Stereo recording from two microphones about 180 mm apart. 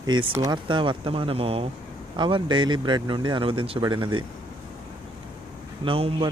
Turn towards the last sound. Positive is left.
turn(degrees=-30)  # may be behind; listen again after turning